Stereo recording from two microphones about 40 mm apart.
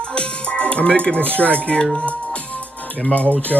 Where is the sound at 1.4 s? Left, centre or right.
Left.